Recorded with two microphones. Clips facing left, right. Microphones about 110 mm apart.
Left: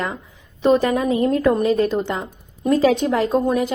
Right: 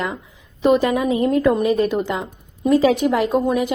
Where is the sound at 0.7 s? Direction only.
15° right (ahead or behind).